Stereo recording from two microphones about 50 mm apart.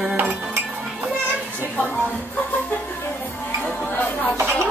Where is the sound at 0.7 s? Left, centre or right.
Centre.